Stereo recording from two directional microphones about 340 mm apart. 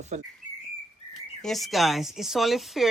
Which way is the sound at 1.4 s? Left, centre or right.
Centre.